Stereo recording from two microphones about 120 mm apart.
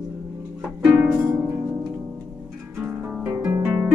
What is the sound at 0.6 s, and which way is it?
Harp, 5° right (ahead or behind).